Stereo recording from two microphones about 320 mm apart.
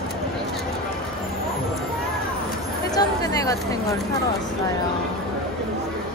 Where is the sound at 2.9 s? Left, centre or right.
Centre.